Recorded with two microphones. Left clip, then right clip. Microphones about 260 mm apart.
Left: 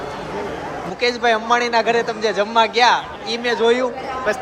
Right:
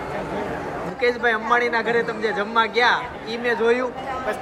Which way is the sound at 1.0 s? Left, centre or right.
Centre.